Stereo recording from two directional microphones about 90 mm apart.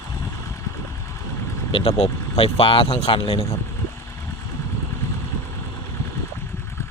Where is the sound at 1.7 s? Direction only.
90° left.